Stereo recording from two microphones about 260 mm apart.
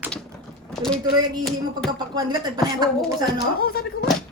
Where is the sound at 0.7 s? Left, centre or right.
Centre.